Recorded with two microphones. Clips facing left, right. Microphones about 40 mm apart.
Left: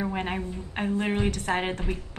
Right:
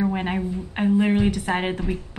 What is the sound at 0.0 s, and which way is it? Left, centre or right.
A woman's voice, centre.